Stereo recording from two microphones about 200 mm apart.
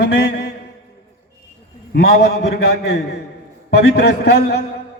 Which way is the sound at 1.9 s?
50° left (ahead or behind).